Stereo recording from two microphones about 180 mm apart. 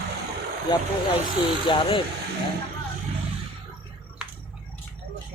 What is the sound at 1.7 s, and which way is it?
Speech, 25° left (ahead or behind).